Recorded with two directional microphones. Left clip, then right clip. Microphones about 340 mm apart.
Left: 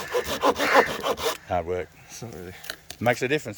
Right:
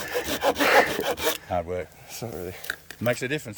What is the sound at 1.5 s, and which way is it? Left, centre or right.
Speech, centre.